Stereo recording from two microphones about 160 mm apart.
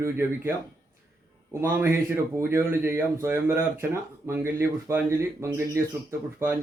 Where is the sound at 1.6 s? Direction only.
15° right (ahead or behind).